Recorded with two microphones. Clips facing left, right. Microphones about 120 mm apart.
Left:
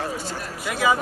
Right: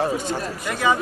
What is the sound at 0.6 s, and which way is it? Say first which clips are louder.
Speech: left 1 dB; 5° left (ahead or behind).